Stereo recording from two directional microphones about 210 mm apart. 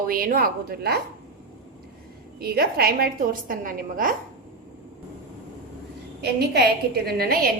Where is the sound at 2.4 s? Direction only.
45° right (ahead or behind).